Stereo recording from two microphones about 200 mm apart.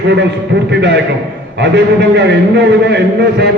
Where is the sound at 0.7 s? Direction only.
60° right (ahead or behind).